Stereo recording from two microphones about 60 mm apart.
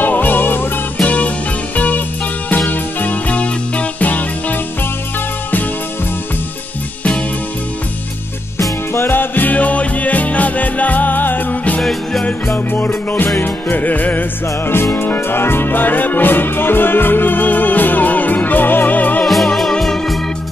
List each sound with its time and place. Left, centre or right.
0.0 s music: left
1.0 s music: left
8.9 s music: left
11.8 s music: centre
12.7 s music: left
15.0 s music: left
19.2 s music: centre